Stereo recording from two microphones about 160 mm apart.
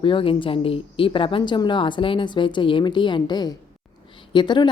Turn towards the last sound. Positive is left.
turn(degrees=30)  # may be behind; listen again after turning